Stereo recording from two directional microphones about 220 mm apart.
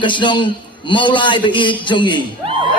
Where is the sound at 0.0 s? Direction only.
20° left (ahead or behind).